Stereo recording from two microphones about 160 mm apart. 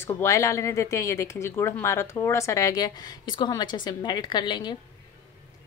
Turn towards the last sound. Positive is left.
turn(degrees=30)  # may be behind; listen again after turning